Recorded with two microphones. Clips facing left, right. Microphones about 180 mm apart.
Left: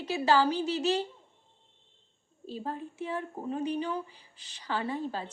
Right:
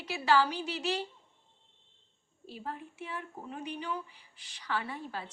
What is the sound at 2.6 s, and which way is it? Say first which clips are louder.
Speech: left 5 dB; 30° left (ahead or behind).